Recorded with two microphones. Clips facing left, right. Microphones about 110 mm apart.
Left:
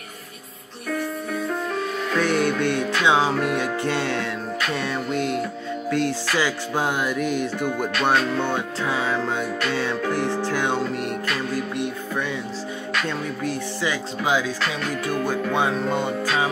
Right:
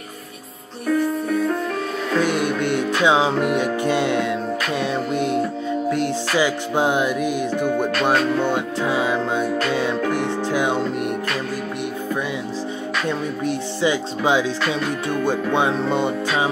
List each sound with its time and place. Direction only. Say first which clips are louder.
2.1 s music: right 1 dB; 15° right (ahead or behind)
8.9 s music: right 3 dB; 15° right (ahead or behind)
13.4 s music: right 4 dB; 20° right (ahead or behind)